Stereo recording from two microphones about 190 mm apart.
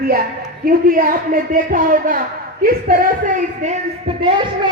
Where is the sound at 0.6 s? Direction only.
50° right (ahead or behind).